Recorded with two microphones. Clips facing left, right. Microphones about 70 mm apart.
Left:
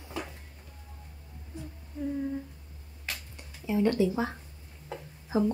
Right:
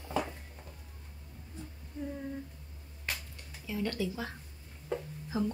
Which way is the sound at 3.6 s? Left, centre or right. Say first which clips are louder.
Left 9 dB; left.